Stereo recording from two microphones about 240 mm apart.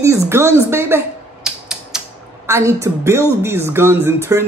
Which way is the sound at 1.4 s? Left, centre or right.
Centre.